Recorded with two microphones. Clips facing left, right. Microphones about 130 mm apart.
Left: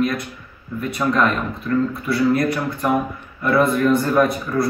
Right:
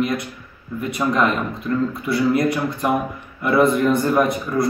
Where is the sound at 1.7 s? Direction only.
20° right (ahead or behind).